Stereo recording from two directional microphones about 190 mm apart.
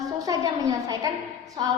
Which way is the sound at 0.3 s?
20° right (ahead or behind).